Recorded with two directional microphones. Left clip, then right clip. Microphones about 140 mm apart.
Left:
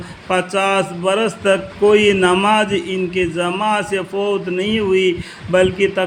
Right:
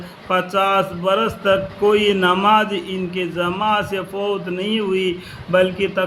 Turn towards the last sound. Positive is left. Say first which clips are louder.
# left 2 dB
turn(degrees=40)  # may be behind; listen again after turning